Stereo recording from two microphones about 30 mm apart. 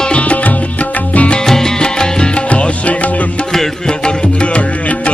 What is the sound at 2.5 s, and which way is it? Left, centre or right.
Music, left.